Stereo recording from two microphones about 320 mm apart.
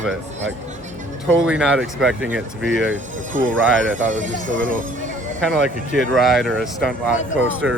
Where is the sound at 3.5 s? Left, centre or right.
Centre.